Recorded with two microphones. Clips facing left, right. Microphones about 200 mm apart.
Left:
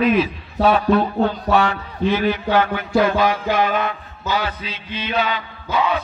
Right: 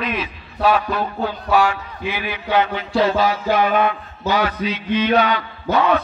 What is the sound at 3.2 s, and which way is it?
Music, 50° left (ahead or behind).